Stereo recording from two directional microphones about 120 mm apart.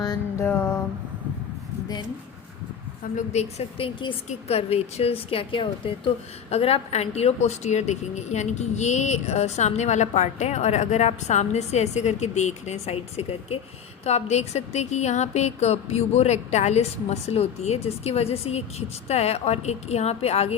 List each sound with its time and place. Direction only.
0.0 s music: 35° left (ahead or behind)
0.4 s a sound: 20° left (ahead or behind)
3.2 s a woman's voice: 60° left (ahead or behind)
4.3 s a woman's voice: 60° left (ahead or behind)